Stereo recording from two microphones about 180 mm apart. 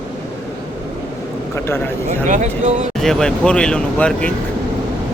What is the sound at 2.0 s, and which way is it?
Speech, 40° right (ahead or behind).